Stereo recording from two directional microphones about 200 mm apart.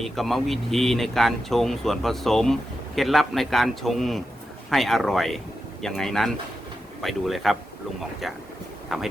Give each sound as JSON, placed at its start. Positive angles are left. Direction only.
{"t": 0.0, "sound": "speech", "side_deg": 0}
{"t": 8.9, "sound": "speech", "side_deg": 0}